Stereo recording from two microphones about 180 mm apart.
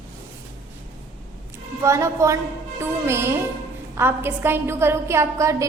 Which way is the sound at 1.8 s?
15° right (ahead or behind).